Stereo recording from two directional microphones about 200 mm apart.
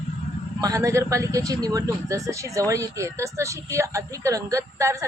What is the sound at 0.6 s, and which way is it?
A woman's voice, 15° right (ahead or behind).